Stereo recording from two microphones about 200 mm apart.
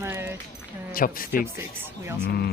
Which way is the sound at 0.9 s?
45° left (ahead or behind).